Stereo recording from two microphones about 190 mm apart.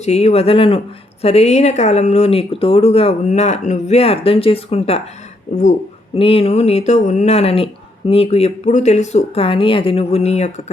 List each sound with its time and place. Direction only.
0.0 s speech: 35° left (ahead or behind)